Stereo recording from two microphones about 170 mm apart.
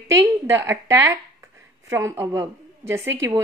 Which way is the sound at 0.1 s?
15° right (ahead or behind).